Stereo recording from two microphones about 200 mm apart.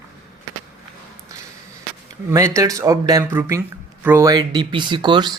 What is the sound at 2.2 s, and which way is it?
Speech, 15° right (ahead or behind).